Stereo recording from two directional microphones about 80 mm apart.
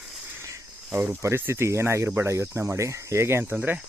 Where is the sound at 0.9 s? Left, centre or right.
Right.